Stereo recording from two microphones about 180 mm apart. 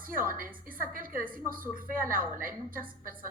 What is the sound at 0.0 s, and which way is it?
A woman's voice, 50° right (ahead or behind).